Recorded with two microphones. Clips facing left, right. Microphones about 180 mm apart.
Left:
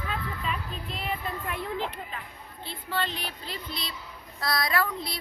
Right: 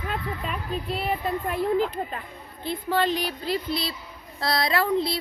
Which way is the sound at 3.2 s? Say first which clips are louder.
Right 10 dB; 40° right (ahead or behind).